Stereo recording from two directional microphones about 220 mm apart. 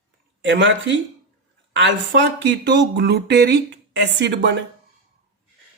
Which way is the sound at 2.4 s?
55° right (ahead or behind).